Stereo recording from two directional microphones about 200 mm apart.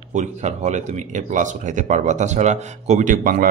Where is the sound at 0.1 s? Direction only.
35° right (ahead or behind).